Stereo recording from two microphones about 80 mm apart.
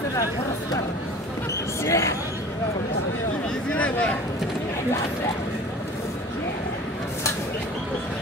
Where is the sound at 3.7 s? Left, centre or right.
Centre.